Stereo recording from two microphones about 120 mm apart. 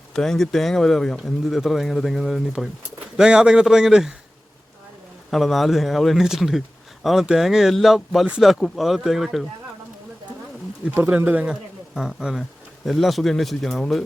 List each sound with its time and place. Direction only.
0.1 s speech: 5° left (ahead or behind)
5.3 s speech: centre (ahead or behind)
10.9 s speech: 20° right (ahead or behind)
11.9 s speech: centre (ahead or behind)